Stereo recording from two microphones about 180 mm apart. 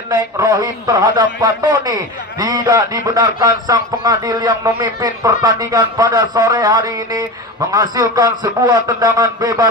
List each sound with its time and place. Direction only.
0.1 s a man's voice: 20° right (ahead or behind)